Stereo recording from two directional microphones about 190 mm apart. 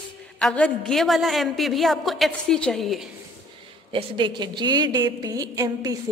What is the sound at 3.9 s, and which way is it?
A woman's voice, 25° right (ahead or behind).